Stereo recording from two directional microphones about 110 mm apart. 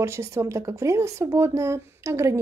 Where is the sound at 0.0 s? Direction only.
25° right (ahead or behind).